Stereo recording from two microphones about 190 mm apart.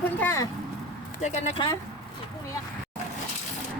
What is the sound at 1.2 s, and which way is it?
Speech, 35° left (ahead or behind).